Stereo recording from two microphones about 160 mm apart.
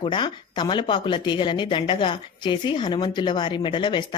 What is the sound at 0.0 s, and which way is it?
Speech, 30° left (ahead or behind).